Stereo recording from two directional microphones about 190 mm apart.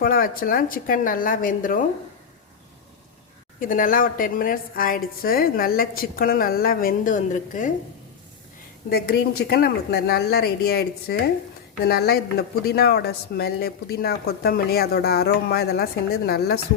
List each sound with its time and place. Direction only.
0.0 s a woman's voice: 50° left (ahead or behind)
3.6 s a woman's voice: 45° left (ahead or behind)
8.9 s speech: 55° left (ahead or behind)